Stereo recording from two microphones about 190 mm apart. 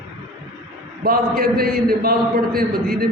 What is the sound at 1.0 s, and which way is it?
A man's voice, 50° right (ahead or behind).